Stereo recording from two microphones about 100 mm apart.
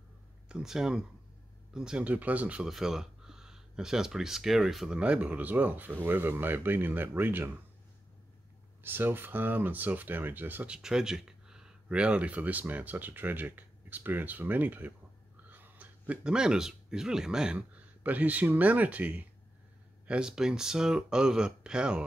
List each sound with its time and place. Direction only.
0.5 s speech: 5° right (ahead or behind)
8.8 s speech: 20° right (ahead or behind)
10.8 s speech: 5° right (ahead or behind)